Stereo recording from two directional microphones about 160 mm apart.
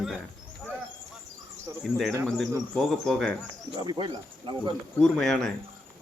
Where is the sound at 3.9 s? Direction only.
30° right (ahead or behind).